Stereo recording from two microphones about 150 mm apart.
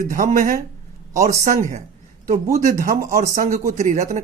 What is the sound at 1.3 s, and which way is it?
Speech, 55° right (ahead or behind).